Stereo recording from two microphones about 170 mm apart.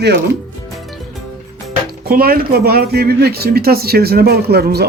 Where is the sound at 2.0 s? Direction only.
60° right (ahead or behind).